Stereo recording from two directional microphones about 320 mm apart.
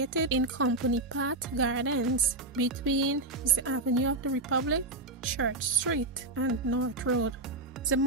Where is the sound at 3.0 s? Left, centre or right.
Right.